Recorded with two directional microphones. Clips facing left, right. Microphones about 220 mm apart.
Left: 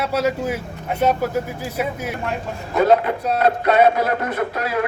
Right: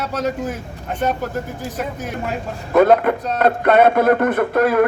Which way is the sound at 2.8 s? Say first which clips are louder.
Right 3 dB; 55° right (ahead or behind).